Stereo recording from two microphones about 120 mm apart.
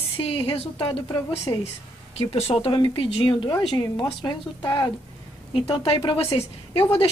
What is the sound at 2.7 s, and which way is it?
Speech, 40° left (ahead or behind).